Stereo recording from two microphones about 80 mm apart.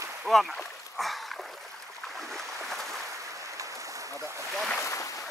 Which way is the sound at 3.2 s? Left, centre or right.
Right.